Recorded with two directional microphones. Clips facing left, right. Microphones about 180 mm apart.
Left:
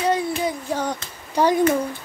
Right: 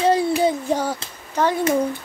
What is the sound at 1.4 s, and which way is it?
Speech, 10° left (ahead or behind).